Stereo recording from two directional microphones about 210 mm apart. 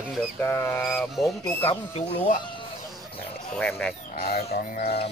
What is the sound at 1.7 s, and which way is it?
Bird, 30° left (ahead or behind).